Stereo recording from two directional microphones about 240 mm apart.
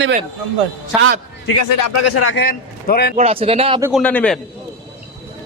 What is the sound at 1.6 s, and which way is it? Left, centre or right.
Speech, left.